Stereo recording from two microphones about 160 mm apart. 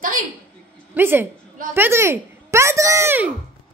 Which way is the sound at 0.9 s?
15° right (ahead or behind).